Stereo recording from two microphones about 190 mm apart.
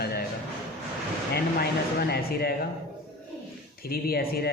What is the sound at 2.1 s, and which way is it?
Speech, 55° left (ahead or behind).